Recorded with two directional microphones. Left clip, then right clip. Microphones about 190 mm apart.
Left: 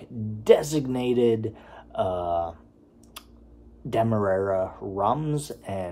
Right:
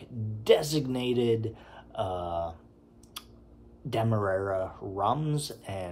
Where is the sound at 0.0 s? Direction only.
5° left (ahead or behind).